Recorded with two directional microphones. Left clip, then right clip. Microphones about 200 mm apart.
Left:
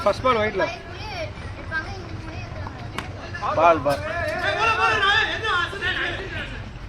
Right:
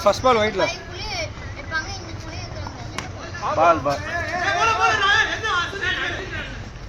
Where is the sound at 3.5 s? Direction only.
25° right (ahead or behind).